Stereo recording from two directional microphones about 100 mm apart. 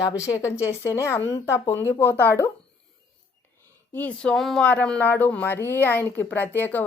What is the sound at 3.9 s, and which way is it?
Speech, 15° left (ahead or behind).